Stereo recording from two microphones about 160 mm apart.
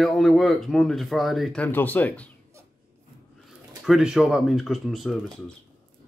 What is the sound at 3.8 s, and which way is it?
Speech, 5° right (ahead or behind).